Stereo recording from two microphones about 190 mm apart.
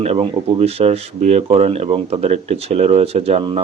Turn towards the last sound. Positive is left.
turn(degrees=-30)  # may be behind; listen again after turning